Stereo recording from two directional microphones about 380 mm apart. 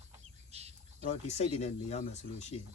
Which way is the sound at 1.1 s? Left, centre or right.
Centre.